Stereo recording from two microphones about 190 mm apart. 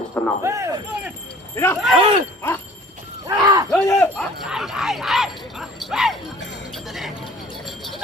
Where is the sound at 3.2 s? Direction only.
20° right (ahead or behind).